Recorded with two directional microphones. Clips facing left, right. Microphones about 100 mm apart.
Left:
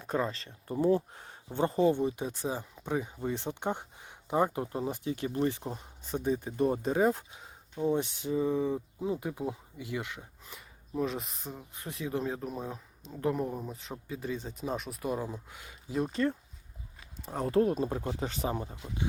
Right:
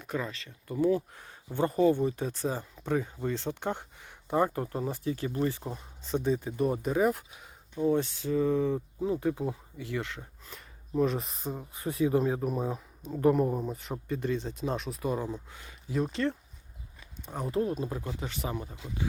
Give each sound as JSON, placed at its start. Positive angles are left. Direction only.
{"t": 0.0, "sound": "speech", "side_deg": 30}
{"t": 11.5, "sound": "speech", "side_deg": -10}
{"t": 14.1, "sound": "speech", "side_deg": 5}
{"t": 17.2, "sound": "speech", "side_deg": 0}
{"t": 17.7, "sound": "speech", "side_deg": 35}